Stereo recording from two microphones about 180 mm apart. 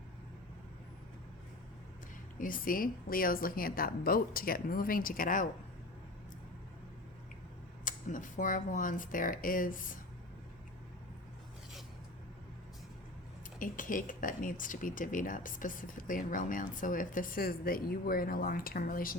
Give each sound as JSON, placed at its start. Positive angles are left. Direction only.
{"t": 2.4, "sound": "speech", "side_deg": 50}
{"t": 7.9, "sound": "speech", "side_deg": 45}
{"t": 13.6, "sound": "speech", "side_deg": 50}